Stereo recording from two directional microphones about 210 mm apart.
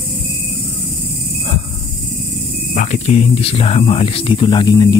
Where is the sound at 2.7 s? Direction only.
35° left (ahead or behind).